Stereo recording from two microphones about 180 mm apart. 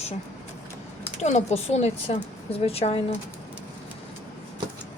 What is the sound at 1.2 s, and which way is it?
A woman's voice, 40° left (ahead or behind).